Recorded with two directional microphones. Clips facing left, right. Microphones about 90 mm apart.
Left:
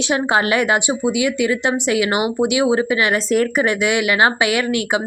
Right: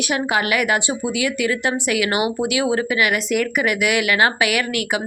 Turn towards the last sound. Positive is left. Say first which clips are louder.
# left 3 dB
turn(degrees=25)  # may be behind; listen again after turning